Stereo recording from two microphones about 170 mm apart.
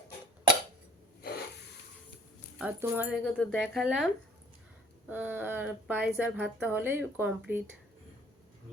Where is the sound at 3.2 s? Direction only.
5° left (ahead or behind); by 7.6 s 10° right (ahead or behind).